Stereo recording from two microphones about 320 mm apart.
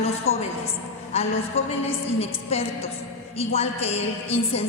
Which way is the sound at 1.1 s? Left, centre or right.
Centre.